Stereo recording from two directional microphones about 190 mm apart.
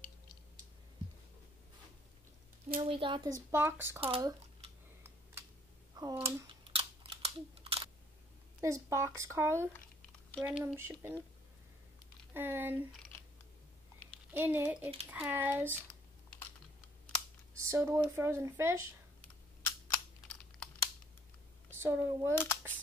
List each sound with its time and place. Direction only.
2.8 s speech: 30° right (ahead or behind); by 4.0 s 10° right (ahead or behind)
4.0 s computer keyboard: 25° right (ahead or behind)
8.5 s speech: 15° right (ahead or behind)
12.4 s speech: 10° right (ahead or behind)
14.3 s speech: 10° right (ahead or behind)
17.6 s speech: 15° right (ahead or behind)
19.6 s computer keyboard: 10° left (ahead or behind)
21.8 s speech: 15° right (ahead or behind)
22.3 s speech: 10° left (ahead or behind)